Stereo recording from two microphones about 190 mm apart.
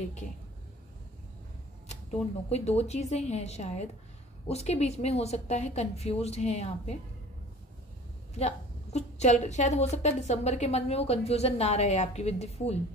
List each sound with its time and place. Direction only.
2.5 s a woman's voice: 35° left (ahead or behind)
8.4 s a woman's voice: 35° left (ahead or behind)